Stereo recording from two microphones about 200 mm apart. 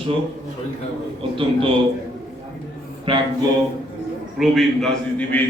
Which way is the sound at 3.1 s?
25° right (ahead or behind).